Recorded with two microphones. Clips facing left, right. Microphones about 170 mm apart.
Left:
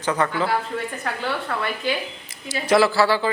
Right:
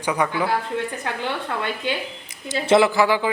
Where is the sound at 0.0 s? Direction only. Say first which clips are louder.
Even; 10° right (ahead or behind).